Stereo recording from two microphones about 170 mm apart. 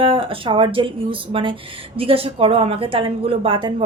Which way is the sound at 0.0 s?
30° right (ahead or behind).